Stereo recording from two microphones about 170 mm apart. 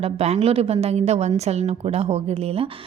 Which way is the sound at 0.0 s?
40° right (ahead or behind).